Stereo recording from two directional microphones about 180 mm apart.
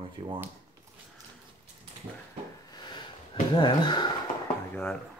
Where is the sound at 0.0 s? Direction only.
30° right (ahead or behind).